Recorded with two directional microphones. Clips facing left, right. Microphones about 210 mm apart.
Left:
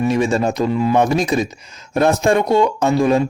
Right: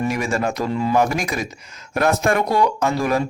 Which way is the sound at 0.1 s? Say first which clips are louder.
Left 5 dB; 25° left (ahead or behind).